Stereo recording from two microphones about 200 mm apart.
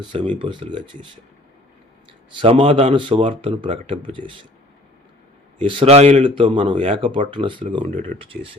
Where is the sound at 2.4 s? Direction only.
25° right (ahead or behind).